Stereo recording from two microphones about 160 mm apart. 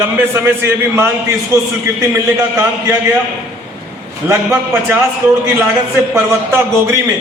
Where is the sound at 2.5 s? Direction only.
20° right (ahead or behind).